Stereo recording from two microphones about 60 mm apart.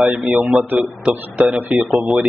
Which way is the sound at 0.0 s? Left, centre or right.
Right.